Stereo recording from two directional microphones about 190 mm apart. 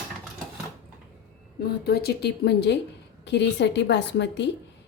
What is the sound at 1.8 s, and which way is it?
A woman's voice, 55° left (ahead or behind).